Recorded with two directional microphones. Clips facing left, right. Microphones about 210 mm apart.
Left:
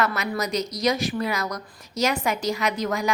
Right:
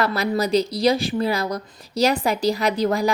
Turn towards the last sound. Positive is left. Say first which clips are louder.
# right 5 dB
turn(degrees=-35)  # may be behind; listen again after turning